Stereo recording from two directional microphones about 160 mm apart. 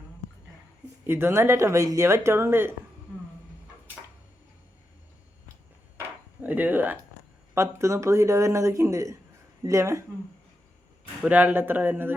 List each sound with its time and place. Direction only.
1.0 s speech: 15° right (ahead or behind)
6.0 s a sound: 10° right (ahead or behind)
7.5 s speech: 15° right (ahead or behind)
11.2 s speech: 10° right (ahead or behind)